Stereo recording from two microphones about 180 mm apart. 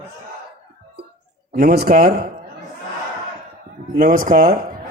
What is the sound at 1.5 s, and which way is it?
Speech, 55° right (ahead or behind).